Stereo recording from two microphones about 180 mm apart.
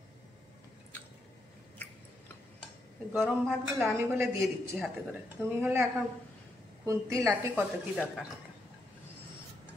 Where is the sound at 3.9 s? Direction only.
15° right (ahead or behind).